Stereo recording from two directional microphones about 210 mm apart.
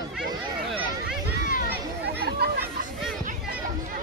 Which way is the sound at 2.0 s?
50° right (ahead or behind).